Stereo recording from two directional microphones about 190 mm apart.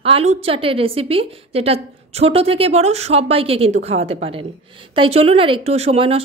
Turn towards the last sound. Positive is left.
turn(degrees=-30)  # may be behind; listen again after turning